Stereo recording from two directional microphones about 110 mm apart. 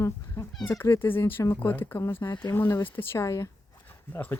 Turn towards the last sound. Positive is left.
turn(degrees=15)  # may be behind; listen again after turning